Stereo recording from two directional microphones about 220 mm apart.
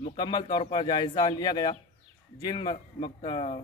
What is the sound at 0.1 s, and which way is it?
A man's voice, 20° left (ahead or behind).